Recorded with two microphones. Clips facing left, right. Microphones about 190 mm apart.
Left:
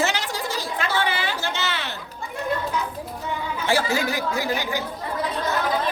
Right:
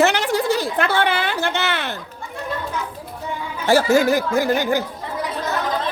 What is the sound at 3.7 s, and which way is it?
Speech, 45° right (ahead or behind).